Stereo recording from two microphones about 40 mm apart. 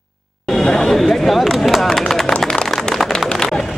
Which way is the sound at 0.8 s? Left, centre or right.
Centre.